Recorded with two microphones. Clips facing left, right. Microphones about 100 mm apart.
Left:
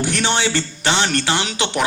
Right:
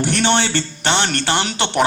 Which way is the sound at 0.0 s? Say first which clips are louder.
Right 2 dB; 50° right (ahead or behind).